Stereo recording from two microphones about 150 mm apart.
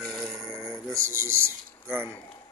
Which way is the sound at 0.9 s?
20° right (ahead or behind).